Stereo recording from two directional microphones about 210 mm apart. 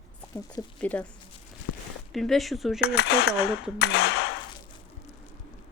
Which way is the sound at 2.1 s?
Centre (ahead or behind).